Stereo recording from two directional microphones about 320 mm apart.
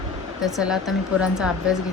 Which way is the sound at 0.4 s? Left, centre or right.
Centre.